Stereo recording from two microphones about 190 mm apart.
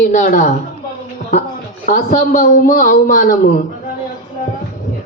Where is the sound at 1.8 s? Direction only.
40° left (ahead or behind).